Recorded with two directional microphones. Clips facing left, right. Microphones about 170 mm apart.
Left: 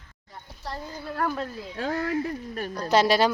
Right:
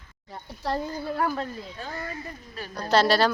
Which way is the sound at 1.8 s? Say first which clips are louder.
Left 13 dB; 85° left.